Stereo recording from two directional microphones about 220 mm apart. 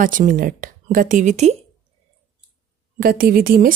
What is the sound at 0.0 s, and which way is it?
Speech, 40° right (ahead or behind).